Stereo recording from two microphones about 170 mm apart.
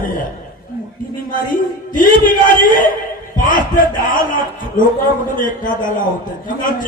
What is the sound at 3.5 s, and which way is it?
A man's voice, 55° left (ahead or behind).